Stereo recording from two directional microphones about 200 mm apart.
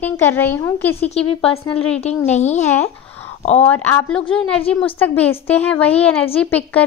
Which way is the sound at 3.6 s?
10° left (ahead or behind).